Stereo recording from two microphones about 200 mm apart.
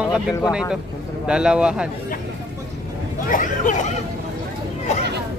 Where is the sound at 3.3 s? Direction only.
40° left (ahead or behind).